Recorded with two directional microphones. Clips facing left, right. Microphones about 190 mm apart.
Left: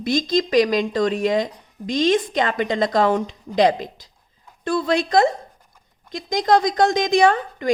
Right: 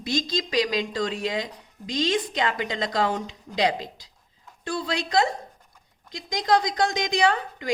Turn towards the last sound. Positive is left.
turn(degrees=50)  # may be behind; listen again after turning